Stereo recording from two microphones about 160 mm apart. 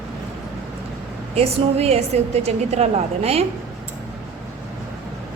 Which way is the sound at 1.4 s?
40° right (ahead or behind).